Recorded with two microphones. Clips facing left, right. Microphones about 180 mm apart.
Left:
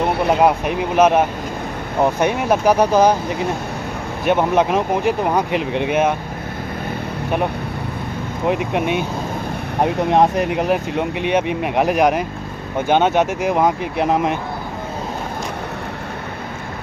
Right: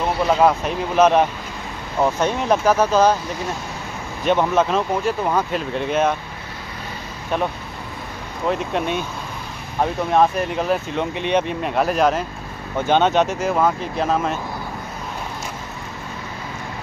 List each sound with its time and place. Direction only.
0.3 s speech: 15° left (ahead or behind)
4.2 s speech: 10° left (ahead or behind)
8.5 s speech: 15° left (ahead or behind)